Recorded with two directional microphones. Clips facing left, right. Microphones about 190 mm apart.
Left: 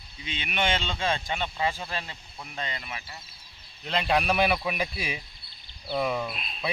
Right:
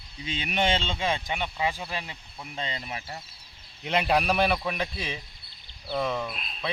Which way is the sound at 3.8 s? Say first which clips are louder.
Right 1 dB; 10° right (ahead or behind).